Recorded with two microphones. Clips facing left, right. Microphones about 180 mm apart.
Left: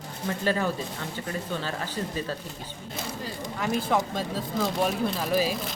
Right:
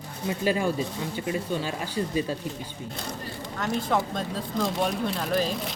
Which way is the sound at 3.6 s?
5° left (ahead or behind).